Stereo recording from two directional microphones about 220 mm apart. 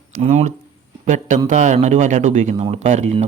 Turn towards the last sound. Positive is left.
turn(degrees=-30)  # may be behind; listen again after turning